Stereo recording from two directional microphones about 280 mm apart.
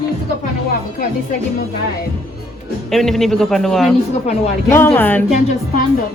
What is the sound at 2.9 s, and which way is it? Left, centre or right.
A man's voice, centre.